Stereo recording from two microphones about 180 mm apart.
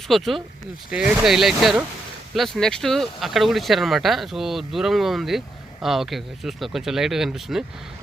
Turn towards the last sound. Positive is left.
turn(degrees=-5)  # may be behind; listen again after turning